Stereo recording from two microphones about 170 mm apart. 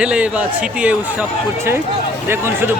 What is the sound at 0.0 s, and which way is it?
Speech, 5° right (ahead or behind).